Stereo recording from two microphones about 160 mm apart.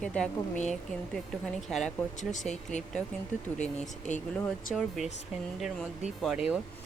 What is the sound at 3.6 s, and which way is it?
Speech, 50° left (ahead or behind).